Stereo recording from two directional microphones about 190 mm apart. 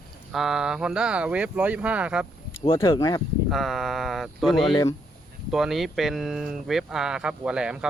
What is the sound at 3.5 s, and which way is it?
Speech, centre (ahead or behind).